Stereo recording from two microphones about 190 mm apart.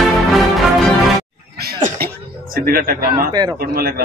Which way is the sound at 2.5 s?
50° right (ahead or behind).